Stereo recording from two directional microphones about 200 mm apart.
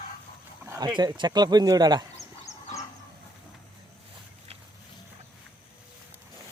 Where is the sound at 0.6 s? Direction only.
20° right (ahead or behind).